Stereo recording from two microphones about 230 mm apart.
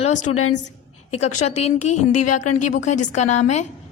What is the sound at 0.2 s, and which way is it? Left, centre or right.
Speech, left.